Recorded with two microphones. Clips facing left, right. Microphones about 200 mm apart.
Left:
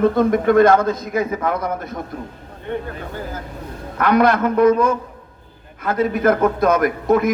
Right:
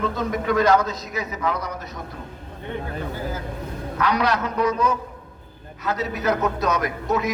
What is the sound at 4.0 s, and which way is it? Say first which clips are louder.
A man's voice: left 7 dB; 50° left (ahead or behind).